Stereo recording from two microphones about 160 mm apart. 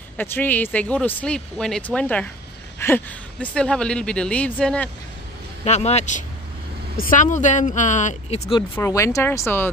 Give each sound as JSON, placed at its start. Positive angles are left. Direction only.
{"t": 0.2, "sound": "speech", "side_deg": 10}
{"t": 5.6, "sound": "speech", "side_deg": 40}
{"t": 8.7, "sound": "speech", "side_deg": 20}